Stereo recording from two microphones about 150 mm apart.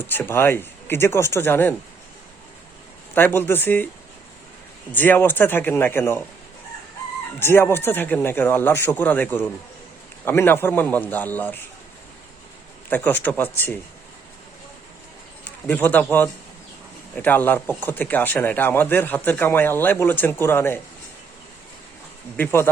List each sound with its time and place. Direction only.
0.0 s speech: 15° left (ahead or behind)
3.2 s speech: 15° left (ahead or behind)
4.9 s speech: 15° left (ahead or behind)
7.3 s speech: 15° left (ahead or behind)
12.9 s speech: 10° left (ahead or behind)
15.6 s speech: 10° left (ahead or behind)
22.4 s speech: 15° left (ahead or behind)